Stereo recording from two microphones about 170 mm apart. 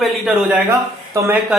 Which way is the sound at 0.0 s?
5° right (ahead or behind).